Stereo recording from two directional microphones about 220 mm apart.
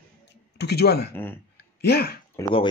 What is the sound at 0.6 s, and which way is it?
Speech, 50° left (ahead or behind).